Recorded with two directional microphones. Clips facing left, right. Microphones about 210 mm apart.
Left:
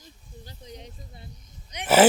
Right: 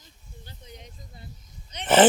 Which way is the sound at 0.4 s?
35° left (ahead or behind).